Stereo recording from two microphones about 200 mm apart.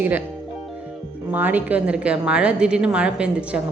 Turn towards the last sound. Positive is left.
turn(degrees=-5)  # may be behind; listen again after turning